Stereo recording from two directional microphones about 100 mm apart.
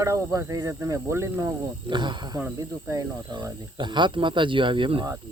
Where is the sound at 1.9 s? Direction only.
50° right (ahead or behind).